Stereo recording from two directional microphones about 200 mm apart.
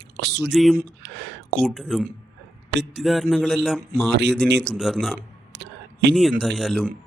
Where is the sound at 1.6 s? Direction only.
Centre (ahead or behind).